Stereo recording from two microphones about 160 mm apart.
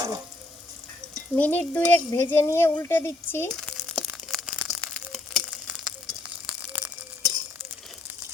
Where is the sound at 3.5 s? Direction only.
Centre (ahead or behind).